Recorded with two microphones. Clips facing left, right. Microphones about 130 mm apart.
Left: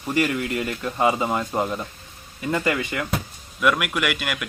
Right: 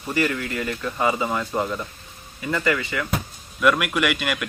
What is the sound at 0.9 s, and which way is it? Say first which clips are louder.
Speech: left 2 dB; 20° left (ahead or behind).